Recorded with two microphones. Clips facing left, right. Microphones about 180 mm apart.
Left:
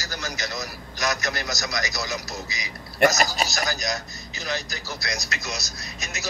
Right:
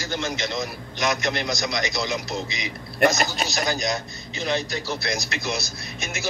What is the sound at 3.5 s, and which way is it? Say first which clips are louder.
Speech: right 3 dB; 25° right (ahead or behind).